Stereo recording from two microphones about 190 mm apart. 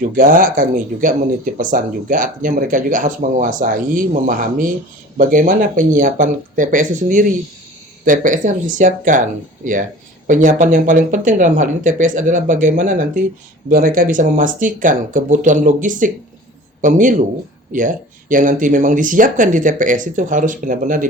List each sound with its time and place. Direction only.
0.0 s speech: 45° right (ahead or behind)
10.2 s speech: 40° right (ahead or behind)